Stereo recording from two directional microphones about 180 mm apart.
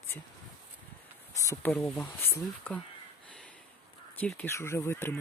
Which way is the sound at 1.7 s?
5° left (ahead or behind).